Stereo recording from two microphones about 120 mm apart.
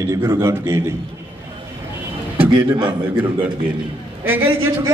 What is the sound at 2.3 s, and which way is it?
Speech, 45° right (ahead or behind).